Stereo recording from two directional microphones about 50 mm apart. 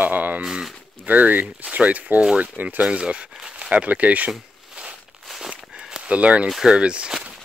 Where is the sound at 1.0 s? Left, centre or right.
Right.